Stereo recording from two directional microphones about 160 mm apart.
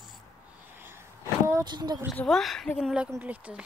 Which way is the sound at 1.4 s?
20° right (ahead or behind).